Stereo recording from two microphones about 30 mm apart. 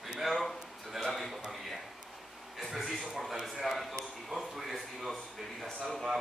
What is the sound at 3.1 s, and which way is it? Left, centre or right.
Speech, centre.